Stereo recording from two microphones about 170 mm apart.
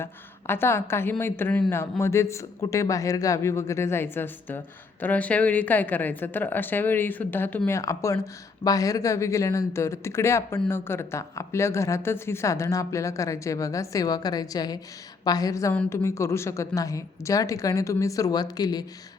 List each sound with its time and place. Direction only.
0.0 s a woman's voice: 15° left (ahead or behind)